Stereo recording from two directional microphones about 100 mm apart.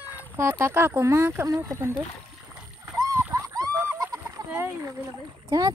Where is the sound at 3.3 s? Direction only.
35° right (ahead or behind).